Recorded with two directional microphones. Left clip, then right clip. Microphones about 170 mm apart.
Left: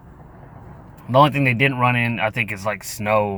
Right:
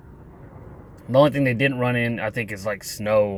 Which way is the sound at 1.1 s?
25° left (ahead or behind).